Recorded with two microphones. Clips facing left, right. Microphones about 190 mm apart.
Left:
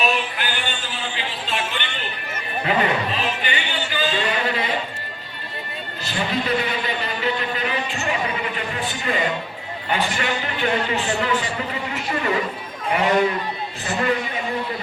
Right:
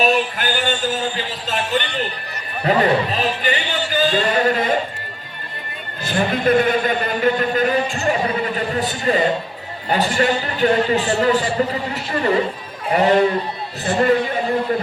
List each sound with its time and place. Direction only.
0.0 s a sound: 40° right (ahead or behind)
2.6 s a man's voice: 40° right (ahead or behind)
6.1 s a man's voice: 50° right (ahead or behind)